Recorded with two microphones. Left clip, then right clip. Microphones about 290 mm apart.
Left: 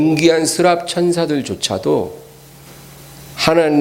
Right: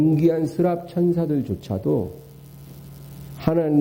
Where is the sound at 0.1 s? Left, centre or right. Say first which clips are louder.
Left 7 dB; centre.